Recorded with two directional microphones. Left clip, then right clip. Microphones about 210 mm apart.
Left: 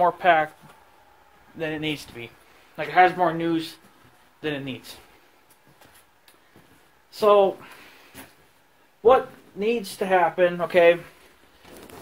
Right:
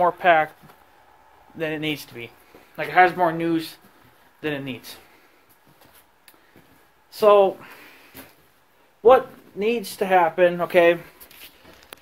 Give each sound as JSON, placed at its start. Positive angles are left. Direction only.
{"t": 0.0, "sound": "speech", "side_deg": -15}
{"t": 1.6, "sound": "speech", "side_deg": -20}
{"t": 7.1, "sound": "speech", "side_deg": -15}